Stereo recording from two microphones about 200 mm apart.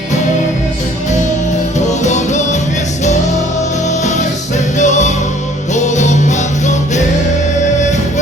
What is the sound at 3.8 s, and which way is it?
Music, 35° left (ahead or behind).